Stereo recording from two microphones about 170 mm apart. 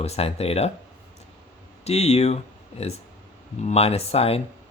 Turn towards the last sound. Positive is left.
turn(degrees=35)  # may be behind; listen again after turning